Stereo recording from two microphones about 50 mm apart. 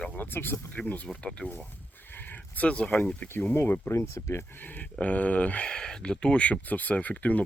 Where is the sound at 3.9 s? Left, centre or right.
Left.